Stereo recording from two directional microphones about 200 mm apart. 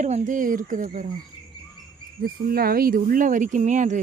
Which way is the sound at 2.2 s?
50° right (ahead or behind).